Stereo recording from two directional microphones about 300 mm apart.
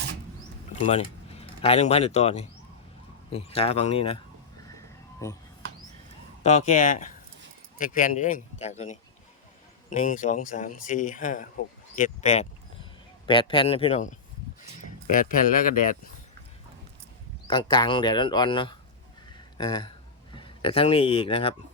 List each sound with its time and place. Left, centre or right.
0.9 s speech: centre
5.2 s speech: centre
6.4 s speech: left
17.5 s speech: centre